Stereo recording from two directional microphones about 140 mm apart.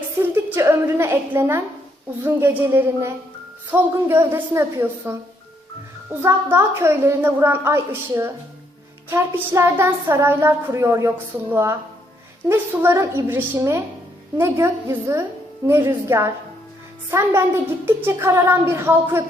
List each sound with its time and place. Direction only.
0.2 s a sound: 15° right (ahead or behind)
2.2 s a woman's voice: 15° right (ahead or behind)
6.2 s a woman's voice: 15° right (ahead or behind)